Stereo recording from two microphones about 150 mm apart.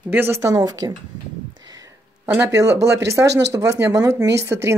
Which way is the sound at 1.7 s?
25° right (ahead or behind).